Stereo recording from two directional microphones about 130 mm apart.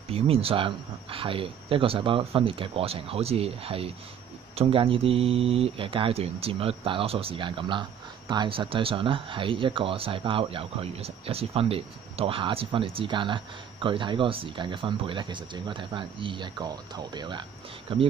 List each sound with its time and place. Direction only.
0.1 s speech: 45° right (ahead or behind)